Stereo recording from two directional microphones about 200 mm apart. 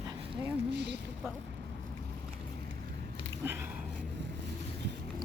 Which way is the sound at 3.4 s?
10° right (ahead or behind).